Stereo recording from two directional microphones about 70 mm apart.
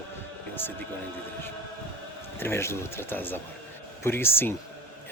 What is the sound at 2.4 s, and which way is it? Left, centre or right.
Speech, left.